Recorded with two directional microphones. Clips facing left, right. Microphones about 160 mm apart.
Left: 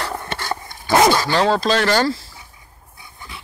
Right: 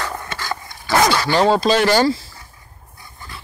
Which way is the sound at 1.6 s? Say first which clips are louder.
Right 2 dB; 5° right (ahead or behind).